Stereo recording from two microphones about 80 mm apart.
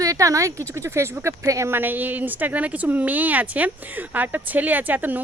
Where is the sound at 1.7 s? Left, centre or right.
Right.